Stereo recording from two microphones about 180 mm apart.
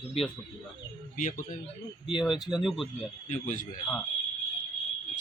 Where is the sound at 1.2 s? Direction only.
45° left (ahead or behind).